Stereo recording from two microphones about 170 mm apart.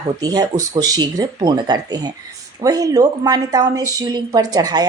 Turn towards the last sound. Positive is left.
turn(degrees=-25)  # may be behind; listen again after turning